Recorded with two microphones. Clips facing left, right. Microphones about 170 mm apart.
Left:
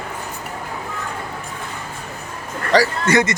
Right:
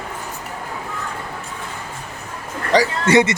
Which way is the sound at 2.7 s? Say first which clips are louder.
Right 1 dB; 20° right (ahead or behind).